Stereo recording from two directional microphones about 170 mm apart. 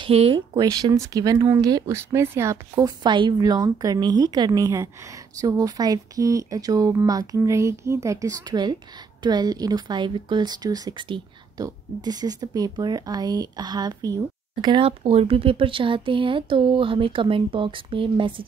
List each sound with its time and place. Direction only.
0.0 s speech: 35° right (ahead or behind)
0.6 s a woman's voice: 20° right (ahead or behind)